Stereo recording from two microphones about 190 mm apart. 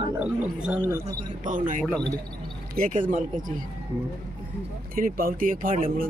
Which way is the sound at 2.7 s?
50° right (ahead or behind).